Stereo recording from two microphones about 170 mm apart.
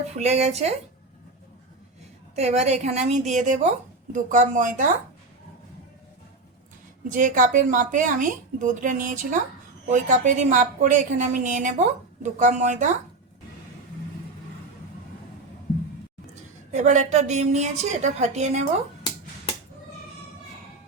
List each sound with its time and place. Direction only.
0.2 s speech: 40° right (ahead or behind)
2.3 s speech: 40° right (ahead or behind)
7.1 s speech: 50° right (ahead or behind)
16.3 s speech: 45° right (ahead or behind)